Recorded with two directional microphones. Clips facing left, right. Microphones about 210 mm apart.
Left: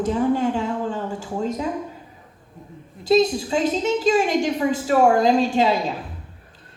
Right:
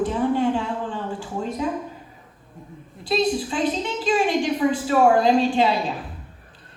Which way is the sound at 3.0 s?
45° left (ahead or behind).